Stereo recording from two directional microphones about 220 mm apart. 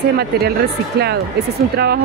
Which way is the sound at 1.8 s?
50° right (ahead or behind).